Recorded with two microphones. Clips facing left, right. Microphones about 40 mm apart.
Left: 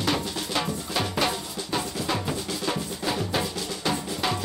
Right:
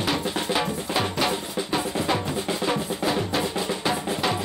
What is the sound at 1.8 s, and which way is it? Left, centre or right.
Music, right.